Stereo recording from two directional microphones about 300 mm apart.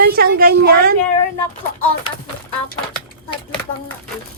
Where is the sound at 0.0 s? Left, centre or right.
Right.